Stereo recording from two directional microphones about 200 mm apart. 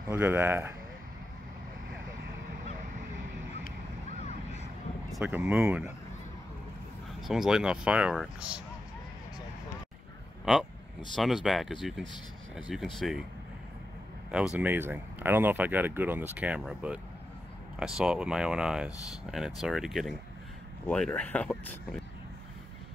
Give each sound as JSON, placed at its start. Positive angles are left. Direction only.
{"t": 0.1, "sound": "speech", "side_deg": -10}
{"t": 4.2, "sound": "vehicle", "side_deg": 35}
{"t": 5.1, "sound": "speech", "side_deg": -10}
{"t": 7.2, "sound": "speech", "side_deg": 0}
{"t": 10.4, "sound": "speech", "side_deg": 0}
{"t": 14.3, "sound": "speech", "side_deg": -5}